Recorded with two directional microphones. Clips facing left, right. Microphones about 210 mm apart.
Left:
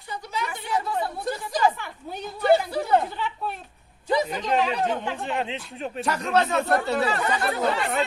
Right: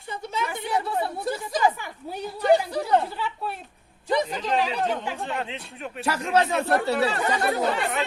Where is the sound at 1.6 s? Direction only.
10° right (ahead or behind).